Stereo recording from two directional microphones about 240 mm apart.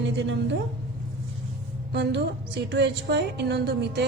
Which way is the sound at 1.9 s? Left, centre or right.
Right.